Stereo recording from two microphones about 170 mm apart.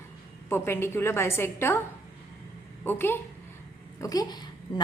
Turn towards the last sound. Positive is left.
turn(degrees=25)  # may be behind; listen again after turning